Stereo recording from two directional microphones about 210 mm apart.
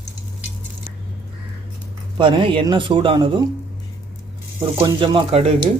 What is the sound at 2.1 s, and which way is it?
Speech, 25° right (ahead or behind).